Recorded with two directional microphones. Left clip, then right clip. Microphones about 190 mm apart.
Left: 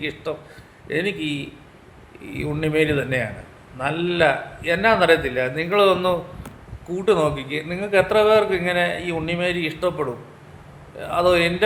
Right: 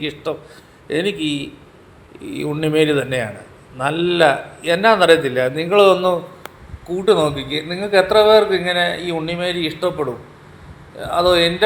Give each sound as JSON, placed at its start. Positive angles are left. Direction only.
{"t": 0.0, "sound": "a man's voice", "side_deg": -20}